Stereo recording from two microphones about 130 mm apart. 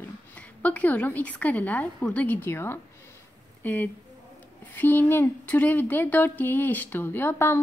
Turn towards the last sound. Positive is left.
turn(degrees=15)  # may be behind; listen again after turning